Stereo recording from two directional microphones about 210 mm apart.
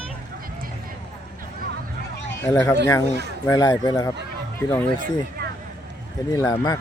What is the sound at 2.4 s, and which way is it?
Speech, 15° left (ahead or behind).